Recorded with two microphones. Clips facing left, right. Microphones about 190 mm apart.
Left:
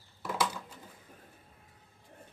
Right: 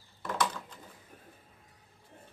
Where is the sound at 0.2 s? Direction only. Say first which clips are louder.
Even; 5° left (ahead or behind).